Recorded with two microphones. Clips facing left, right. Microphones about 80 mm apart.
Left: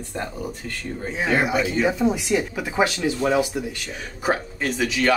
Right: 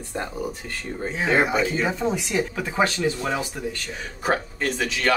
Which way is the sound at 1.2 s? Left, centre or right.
Right.